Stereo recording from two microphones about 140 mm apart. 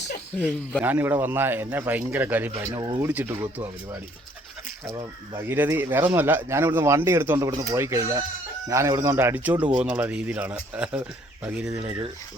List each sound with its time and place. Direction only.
0.3 s speech: 10° left (ahead or behind)
0.8 s speech: 15° right (ahead or behind)
5.4 s speech: 15° right (ahead or behind)